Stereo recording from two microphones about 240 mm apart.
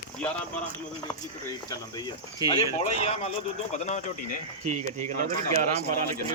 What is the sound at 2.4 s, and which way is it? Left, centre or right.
Speech, left.